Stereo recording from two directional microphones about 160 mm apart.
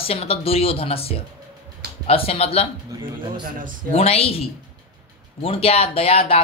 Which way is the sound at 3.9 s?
40° left (ahead or behind).